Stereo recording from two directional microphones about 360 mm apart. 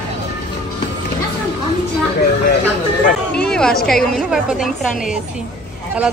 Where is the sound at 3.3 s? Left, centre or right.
Centre.